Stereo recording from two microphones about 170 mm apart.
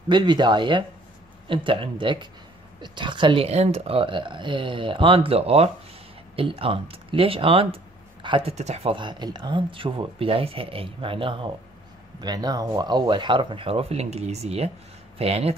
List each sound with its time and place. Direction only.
0.1 s speech: 25° right (ahead or behind)
8.9 s speech: 25° right (ahead or behind)